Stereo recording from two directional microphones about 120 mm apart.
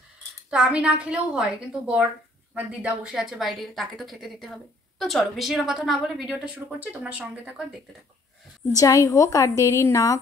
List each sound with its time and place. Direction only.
0.5 s a woman's voice: 10° right (ahead or behind)
8.7 s a woman's voice: 30° left (ahead or behind)